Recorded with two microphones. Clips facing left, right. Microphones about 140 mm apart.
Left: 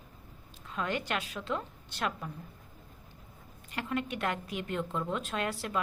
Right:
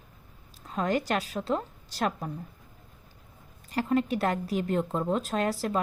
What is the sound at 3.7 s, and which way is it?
A woman's voice, 35° right (ahead or behind).